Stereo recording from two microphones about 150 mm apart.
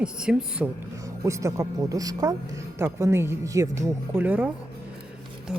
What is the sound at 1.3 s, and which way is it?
Speech, 20° right (ahead or behind).